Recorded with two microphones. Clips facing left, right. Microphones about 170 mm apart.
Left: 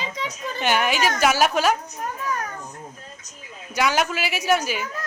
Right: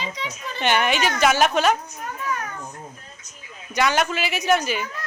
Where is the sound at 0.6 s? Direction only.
5° left (ahead or behind).